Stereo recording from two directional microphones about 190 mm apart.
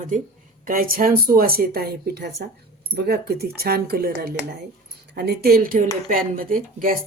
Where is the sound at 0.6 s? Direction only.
50° right (ahead or behind).